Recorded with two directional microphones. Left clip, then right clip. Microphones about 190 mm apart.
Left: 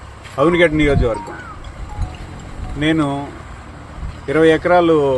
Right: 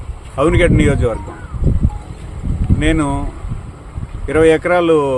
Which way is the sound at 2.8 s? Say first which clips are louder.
Even; 30° right (ahead or behind).